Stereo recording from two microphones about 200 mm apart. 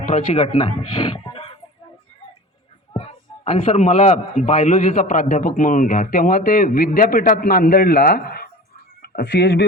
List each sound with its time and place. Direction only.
0.0 s speech: 35° left (ahead or behind)
2.9 s a man's voice: 30° left (ahead or behind); by 9.6 s 55° left (ahead or behind)